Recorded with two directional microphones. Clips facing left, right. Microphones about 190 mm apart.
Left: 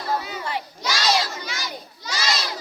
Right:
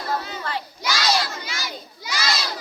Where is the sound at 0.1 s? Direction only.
10° left (ahead or behind).